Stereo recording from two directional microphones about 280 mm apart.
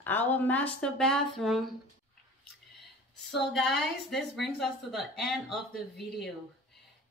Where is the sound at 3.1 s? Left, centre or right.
Centre.